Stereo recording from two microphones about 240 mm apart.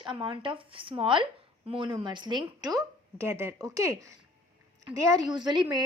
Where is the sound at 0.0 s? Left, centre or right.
Centre.